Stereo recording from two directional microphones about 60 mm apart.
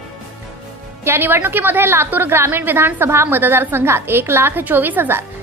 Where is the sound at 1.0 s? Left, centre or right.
Right.